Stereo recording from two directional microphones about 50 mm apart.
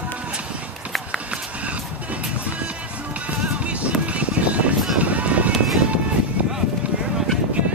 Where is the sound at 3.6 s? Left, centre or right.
Right.